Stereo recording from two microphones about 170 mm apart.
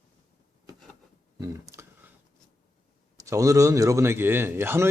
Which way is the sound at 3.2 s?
20° right (ahead or behind).